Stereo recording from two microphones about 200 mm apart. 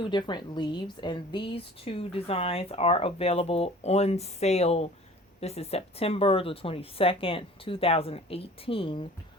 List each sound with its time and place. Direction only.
0.0 s speech: 20° left (ahead or behind)